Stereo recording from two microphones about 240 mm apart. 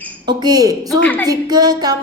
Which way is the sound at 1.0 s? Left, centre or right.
Centre.